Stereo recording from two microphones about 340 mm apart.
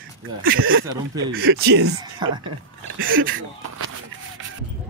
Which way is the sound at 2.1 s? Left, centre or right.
Centre.